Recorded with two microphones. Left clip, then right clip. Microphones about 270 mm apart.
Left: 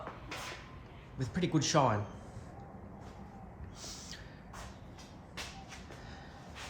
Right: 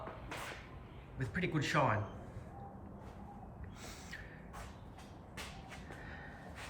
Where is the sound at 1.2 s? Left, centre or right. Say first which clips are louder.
Left 4 dB; centre.